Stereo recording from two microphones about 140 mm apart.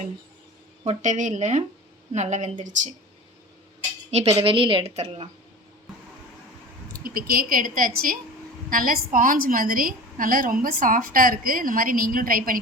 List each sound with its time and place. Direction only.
0.9 s speech: 60° right (ahead or behind)
4.1 s speech: 50° right (ahead or behind)
4.9 s speech: 45° right (ahead or behind)
7.0 s a woman's voice: 90° right